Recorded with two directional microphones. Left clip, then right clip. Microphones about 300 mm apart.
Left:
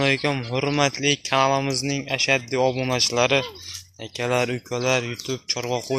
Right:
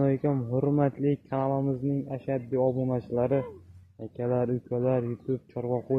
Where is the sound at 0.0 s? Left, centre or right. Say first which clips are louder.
Left 6 dB; centre.